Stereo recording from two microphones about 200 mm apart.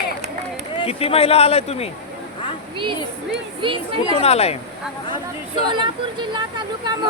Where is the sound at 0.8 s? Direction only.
30° left (ahead or behind).